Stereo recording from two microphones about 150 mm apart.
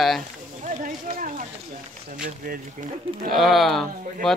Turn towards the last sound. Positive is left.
turn(degrees=0)  # may be behind; listen again after turning